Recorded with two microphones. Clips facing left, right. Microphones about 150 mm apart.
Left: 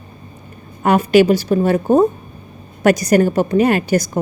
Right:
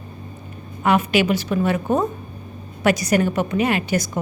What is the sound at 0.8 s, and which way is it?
A woman's voice, 40° left (ahead or behind).